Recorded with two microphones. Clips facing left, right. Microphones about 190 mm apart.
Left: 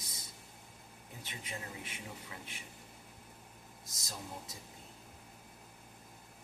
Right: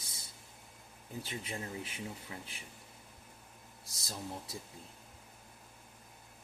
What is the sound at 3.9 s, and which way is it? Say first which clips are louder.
Speech: right 3 dB; 30° right (ahead or behind).